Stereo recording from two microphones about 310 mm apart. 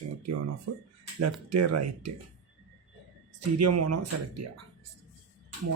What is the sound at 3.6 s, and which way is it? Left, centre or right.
Speech, right.